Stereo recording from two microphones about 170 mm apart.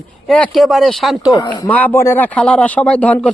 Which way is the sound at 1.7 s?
10° left (ahead or behind).